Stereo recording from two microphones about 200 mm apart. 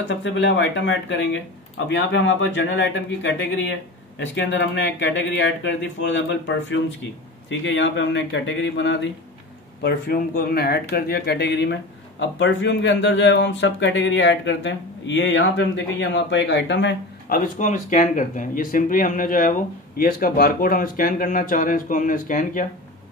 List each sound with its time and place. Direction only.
0.0 s speech: 65° left (ahead or behind)
9.8 s speech: 50° left (ahead or behind)
17.3 s speech: 40° left (ahead or behind)